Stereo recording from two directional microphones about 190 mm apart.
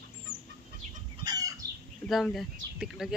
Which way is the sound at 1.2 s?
20° right (ahead or behind).